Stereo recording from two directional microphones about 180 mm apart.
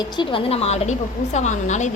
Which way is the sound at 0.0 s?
25° left (ahead or behind).